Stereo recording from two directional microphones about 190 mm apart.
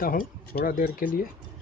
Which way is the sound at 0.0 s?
50° left (ahead or behind).